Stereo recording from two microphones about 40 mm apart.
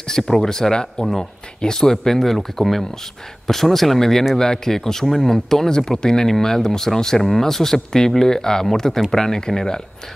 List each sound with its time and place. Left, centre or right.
0.0 s speech: centre